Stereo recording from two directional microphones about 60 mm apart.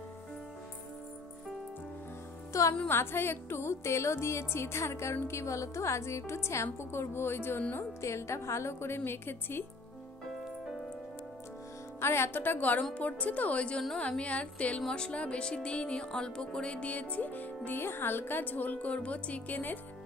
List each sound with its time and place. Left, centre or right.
2.5 s music: left
2.9 s speech: left
8.0 s speech: left
12.0 s a woman's voice: left